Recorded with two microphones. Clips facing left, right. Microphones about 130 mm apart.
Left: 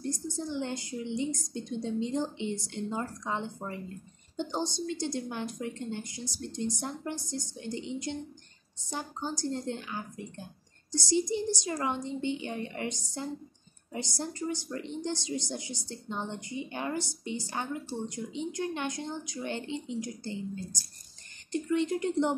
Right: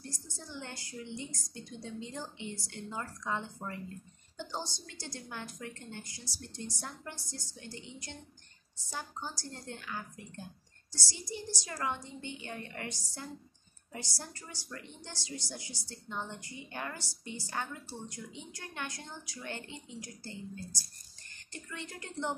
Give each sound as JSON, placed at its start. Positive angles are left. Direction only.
{"t": 0.0, "sound": "a woman's voice", "side_deg": 20}